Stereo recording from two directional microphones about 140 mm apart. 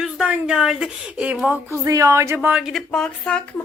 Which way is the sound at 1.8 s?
25° right (ahead or behind).